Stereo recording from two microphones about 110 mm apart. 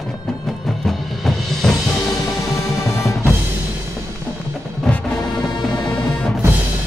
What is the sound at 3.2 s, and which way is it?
Music, 20° right (ahead or behind).